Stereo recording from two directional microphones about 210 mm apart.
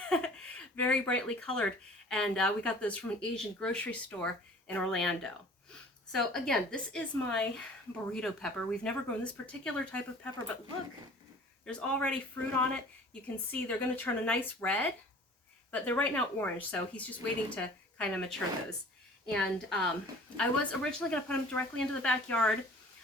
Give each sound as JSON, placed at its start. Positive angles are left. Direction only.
{"t": 0.0, "sound": "speech", "side_deg": 5}
{"t": 11.6, "sound": "speech", "side_deg": 5}
{"t": 13.2, "sound": "speech", "side_deg": 5}